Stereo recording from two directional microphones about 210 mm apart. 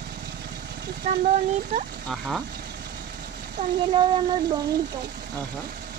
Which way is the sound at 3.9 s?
25° right (ahead or behind).